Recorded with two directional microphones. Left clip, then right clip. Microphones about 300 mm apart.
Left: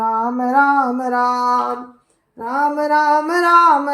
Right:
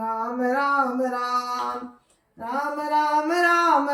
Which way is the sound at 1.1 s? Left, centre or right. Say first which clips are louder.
Left 8 dB; centre.